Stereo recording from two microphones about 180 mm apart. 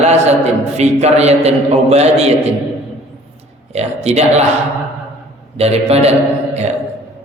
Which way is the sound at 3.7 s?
35° right (ahead or behind).